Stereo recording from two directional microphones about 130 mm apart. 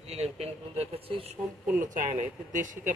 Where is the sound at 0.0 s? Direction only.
55° right (ahead or behind).